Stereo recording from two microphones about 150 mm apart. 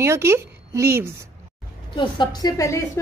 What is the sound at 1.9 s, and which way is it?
Speech, 30° left (ahead or behind).